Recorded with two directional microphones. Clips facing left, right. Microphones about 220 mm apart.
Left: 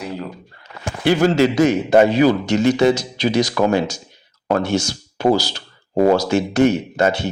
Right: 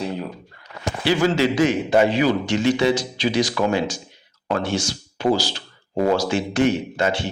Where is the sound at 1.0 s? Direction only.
45° left (ahead or behind).